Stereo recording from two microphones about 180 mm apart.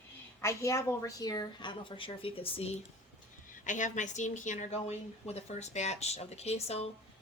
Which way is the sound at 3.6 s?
45° left (ahead or behind).